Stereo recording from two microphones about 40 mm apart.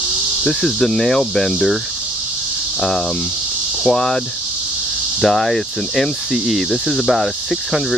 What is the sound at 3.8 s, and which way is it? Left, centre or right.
Speech, centre.